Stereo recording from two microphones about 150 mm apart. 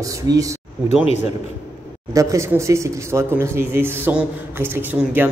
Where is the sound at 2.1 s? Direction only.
20° right (ahead or behind).